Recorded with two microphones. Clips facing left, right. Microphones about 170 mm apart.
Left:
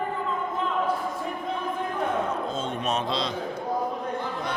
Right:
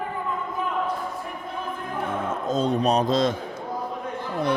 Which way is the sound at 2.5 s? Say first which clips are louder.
Right 7 dB; 35° right (ahead or behind).